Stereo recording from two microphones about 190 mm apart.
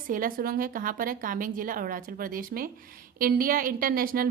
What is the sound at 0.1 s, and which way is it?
A woman's voice, 45° right (ahead or behind).